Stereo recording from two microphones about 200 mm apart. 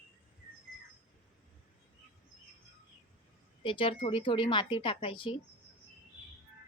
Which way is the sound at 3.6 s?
25° left (ahead or behind).